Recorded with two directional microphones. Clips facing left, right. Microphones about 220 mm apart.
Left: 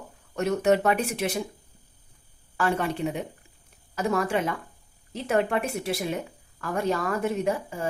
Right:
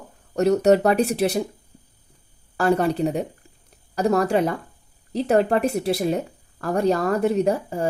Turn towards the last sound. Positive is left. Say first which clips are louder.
# right 6 dB
turn(degrees=-40)  # may be behind; listen again after turning